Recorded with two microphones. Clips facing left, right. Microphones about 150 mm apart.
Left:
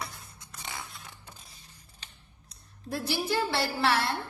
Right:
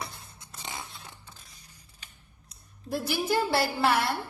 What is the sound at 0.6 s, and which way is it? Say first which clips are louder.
Biting: right 1 dB; 20° right (ahead or behind).